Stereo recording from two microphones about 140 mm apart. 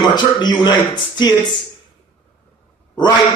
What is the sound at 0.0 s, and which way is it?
Speech, 30° left (ahead or behind).